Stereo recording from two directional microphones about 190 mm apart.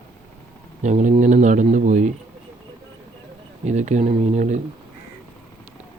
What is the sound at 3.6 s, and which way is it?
Speech, 35° right (ahead or behind).